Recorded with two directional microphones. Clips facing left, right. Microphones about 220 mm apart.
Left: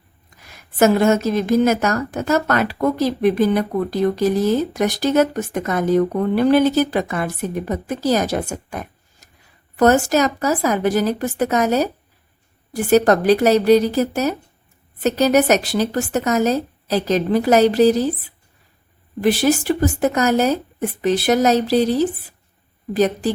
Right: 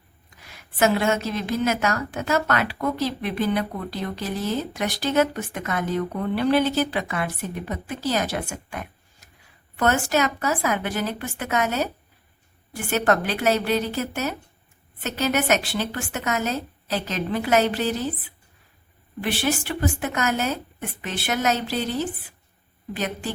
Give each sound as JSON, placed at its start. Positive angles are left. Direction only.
{"t": 0.8, "sound": "a woman's voice", "side_deg": 40}
{"t": 19.2, "sound": "speech", "side_deg": 40}